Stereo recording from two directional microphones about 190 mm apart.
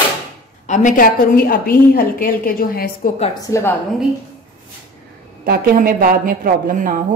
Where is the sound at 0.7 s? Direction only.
45° left (ahead or behind).